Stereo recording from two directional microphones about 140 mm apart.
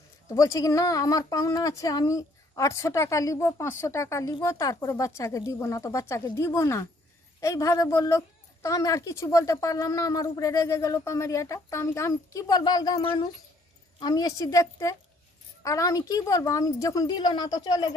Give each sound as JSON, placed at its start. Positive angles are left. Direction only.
{"t": 0.3, "sound": "speech", "side_deg": 25}